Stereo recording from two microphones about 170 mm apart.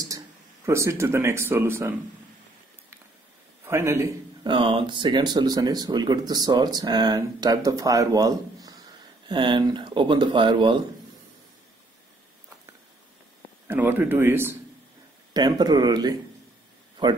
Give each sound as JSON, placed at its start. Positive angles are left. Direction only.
{"t": 0.7, "sound": "speech", "side_deg": -15}
{"t": 3.6, "sound": "a man's voice", "side_deg": -15}
{"t": 4.5, "sound": "speech", "side_deg": -30}
{"t": 13.7, "sound": "speech", "side_deg": -10}
{"t": 15.3, "sound": "speech", "side_deg": -25}